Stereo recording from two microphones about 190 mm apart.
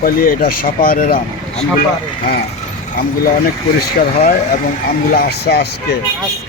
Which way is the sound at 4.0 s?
50° left (ahead or behind).